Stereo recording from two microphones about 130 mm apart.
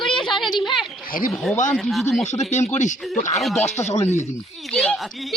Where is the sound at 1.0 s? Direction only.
90° left.